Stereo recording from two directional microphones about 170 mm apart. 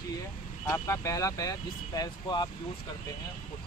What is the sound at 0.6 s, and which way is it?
Speech, 15° left (ahead or behind).